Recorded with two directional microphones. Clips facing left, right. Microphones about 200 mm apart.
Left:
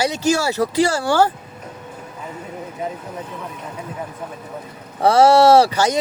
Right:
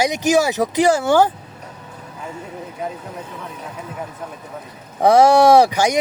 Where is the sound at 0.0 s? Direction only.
15° right (ahead or behind).